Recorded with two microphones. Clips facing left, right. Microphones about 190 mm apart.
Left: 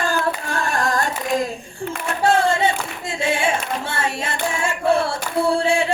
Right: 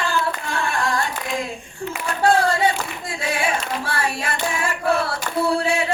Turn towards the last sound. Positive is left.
turn(degrees=25)  # may be behind; listen again after turning